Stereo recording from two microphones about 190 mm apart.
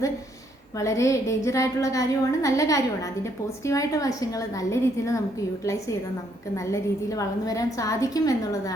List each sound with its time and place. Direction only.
0.8 s a woman's voice: 15° left (ahead or behind)